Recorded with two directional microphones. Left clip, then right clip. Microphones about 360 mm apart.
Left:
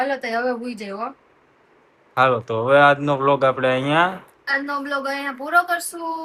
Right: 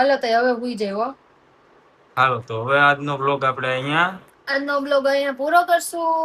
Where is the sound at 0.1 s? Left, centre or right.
Right.